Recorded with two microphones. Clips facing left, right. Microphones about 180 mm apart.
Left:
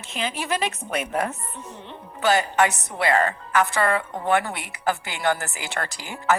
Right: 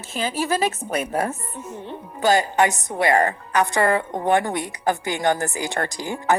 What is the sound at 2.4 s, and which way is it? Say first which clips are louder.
A woman's voice: right 2 dB; 15° right (ahead or behind).